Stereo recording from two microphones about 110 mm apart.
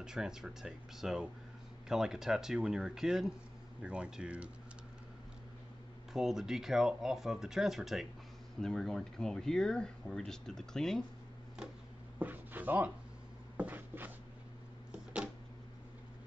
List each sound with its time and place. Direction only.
0.0 s speech: 5° right (ahead or behind)
6.1 s speech: 5° right (ahead or behind)
12.2 s a sound: 15° right (ahead or behind)
13.6 s writing: 15° right (ahead or behind)